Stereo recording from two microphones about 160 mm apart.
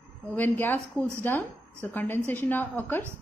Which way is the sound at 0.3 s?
10° left (ahead or behind).